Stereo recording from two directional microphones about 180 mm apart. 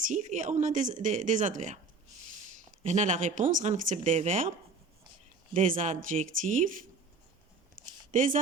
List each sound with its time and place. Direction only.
0.0 s speech: 40° right (ahead or behind)
5.5 s speech: 45° right (ahead or behind)
8.1 s speech: 45° right (ahead or behind)